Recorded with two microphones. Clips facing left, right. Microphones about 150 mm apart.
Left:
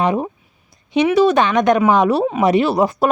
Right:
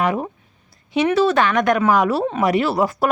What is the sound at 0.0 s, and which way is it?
Speech, 20° left (ahead or behind).